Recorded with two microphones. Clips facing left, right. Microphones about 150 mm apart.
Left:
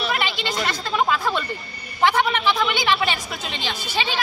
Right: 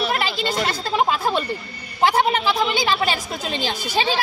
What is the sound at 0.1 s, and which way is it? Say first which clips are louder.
Chatter: right 2 dB; 35° right (ahead or behind).